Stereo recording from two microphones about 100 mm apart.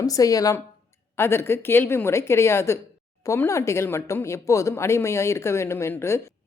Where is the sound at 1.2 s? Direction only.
25° left (ahead or behind).